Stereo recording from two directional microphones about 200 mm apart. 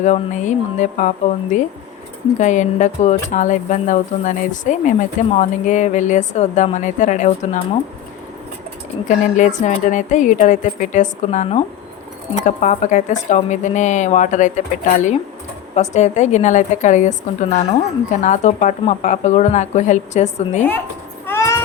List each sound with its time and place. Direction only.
0.0 s speech: 40° left (ahead or behind)
9.0 s speech: 40° left (ahead or behind)
15.7 s speech: 35° left (ahead or behind)
21.2 s a sound: 15° left (ahead or behind)